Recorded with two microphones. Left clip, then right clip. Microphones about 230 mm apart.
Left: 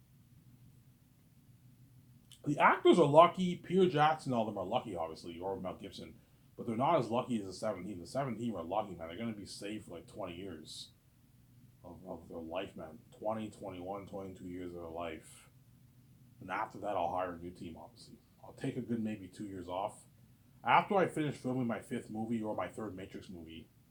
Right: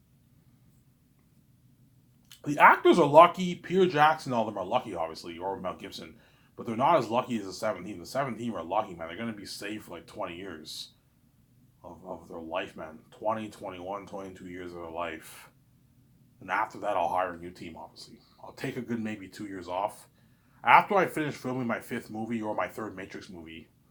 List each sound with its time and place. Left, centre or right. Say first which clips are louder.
2.4 s speech: right 8 dB; centre
11.8 s speech: right 6 dB; centre
16.5 s speech: right 8 dB; centre